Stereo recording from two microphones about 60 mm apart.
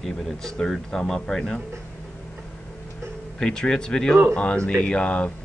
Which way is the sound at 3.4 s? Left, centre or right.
Centre.